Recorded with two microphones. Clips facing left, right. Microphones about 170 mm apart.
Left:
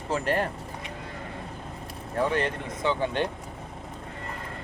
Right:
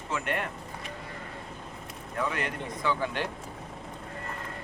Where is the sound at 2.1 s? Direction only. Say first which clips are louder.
Left 6 dB; 30° left (ahead or behind).